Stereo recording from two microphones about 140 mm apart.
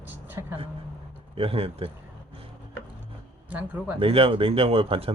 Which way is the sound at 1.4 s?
45° right (ahead or behind).